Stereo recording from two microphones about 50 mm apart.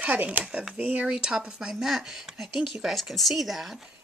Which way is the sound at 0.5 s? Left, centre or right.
Centre.